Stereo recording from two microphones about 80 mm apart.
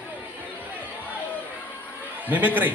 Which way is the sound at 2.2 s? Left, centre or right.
Right.